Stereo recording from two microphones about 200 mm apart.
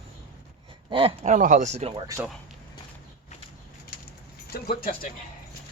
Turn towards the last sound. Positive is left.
turn(degrees=45)  # may be behind; listen again after turning